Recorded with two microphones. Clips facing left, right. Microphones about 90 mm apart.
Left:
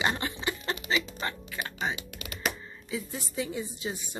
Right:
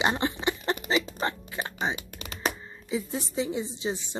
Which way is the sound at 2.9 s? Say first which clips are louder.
Right 5 dB; 20° right (ahead or behind).